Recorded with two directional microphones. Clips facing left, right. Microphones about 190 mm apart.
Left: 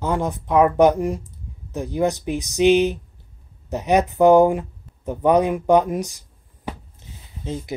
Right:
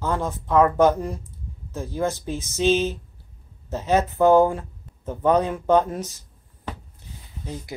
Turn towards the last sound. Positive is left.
turn(degrees=20)  # may be behind; listen again after turning